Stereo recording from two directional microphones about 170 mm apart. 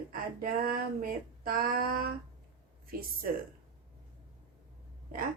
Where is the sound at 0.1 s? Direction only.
60° right (ahead or behind).